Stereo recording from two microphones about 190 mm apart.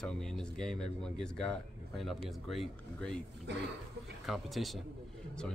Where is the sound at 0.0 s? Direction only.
5° left (ahead or behind).